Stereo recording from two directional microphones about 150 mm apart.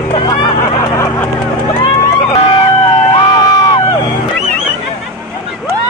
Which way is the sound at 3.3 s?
30° left (ahead or behind).